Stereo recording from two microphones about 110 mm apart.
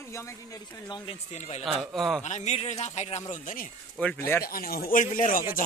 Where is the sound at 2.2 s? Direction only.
90° left.